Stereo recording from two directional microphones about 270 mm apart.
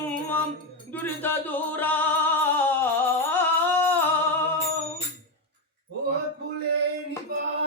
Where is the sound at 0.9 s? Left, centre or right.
Centre.